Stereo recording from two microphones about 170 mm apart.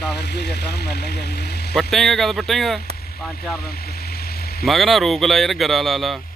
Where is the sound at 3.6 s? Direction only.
65° left (ahead or behind).